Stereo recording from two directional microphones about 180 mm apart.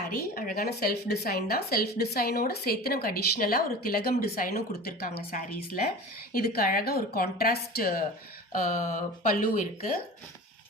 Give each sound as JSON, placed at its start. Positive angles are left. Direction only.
{"t": 0.3, "sound": "a woman's voice", "side_deg": 50}